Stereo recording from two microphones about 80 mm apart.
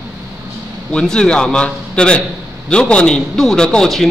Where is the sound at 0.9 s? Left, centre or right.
Centre.